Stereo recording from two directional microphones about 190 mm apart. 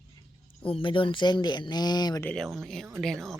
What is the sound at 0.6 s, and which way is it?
Speech, 30° left (ahead or behind).